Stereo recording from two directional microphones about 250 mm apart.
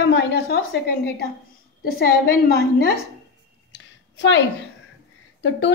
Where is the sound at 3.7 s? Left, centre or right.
Left.